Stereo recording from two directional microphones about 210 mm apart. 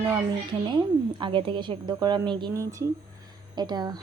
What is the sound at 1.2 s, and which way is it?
Speech, 25° right (ahead or behind).